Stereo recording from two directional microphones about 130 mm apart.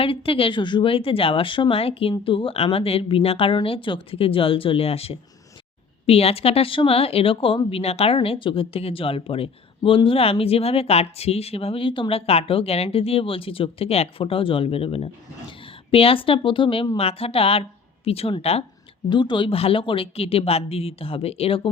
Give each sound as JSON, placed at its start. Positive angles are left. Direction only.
{"t": 0.0, "sound": "a woman's voice", "side_deg": 45}
{"t": 19.1, "sound": "speech", "side_deg": 35}